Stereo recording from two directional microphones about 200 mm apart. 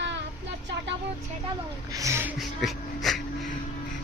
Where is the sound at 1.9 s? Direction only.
15° right (ahead or behind).